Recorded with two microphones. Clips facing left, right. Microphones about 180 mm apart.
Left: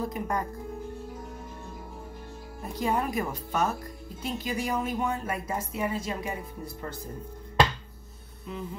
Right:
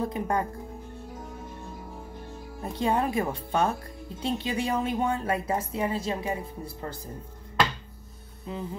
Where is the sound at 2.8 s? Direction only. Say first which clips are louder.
Right 2 dB; 25° right (ahead or behind).